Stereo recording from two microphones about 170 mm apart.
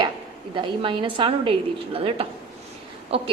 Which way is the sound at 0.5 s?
30° right (ahead or behind).